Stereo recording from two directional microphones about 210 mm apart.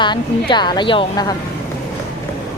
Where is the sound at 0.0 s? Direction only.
20° left (ahead or behind).